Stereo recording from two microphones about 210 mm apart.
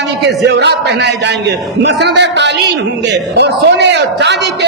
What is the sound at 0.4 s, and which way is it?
A man's voice, 55° right (ahead or behind).